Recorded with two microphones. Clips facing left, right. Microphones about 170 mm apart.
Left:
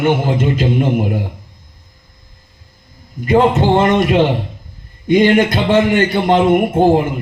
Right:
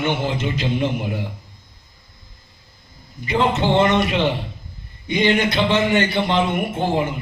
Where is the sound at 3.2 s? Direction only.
50° left (ahead or behind).